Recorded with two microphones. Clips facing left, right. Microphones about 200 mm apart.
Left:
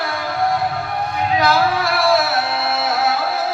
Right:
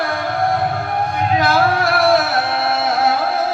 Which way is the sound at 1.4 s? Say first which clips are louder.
Right 1 dB; 50° right (ahead or behind).